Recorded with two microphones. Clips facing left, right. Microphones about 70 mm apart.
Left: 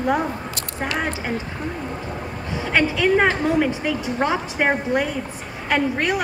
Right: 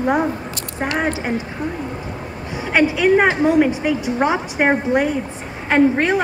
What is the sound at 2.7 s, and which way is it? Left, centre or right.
A woman's voice, centre.